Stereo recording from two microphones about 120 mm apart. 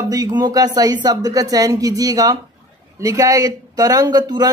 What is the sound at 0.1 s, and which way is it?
Speech, 35° right (ahead or behind).